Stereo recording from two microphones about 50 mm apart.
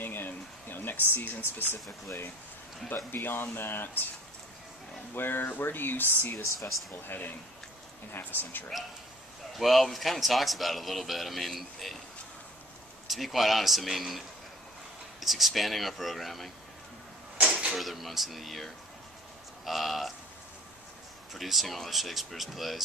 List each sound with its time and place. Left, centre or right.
0.0 s a sound: left
3.1 s speech: left
5.1 s speech: left
9.6 s a man's voice: centre
13.1 s a man's voice: centre
17.4 s a sound: right
17.7 s a man's voice: centre
21.3 s a man's voice: centre